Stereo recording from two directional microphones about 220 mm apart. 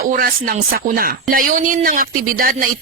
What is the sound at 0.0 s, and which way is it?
Speech, 40° right (ahead or behind).